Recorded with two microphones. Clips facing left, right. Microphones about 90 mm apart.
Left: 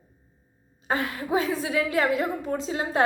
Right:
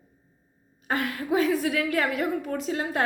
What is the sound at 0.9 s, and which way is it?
A woman's voice, 25° left (ahead or behind).